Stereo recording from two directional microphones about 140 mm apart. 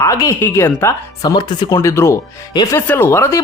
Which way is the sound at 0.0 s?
25° left (ahead or behind).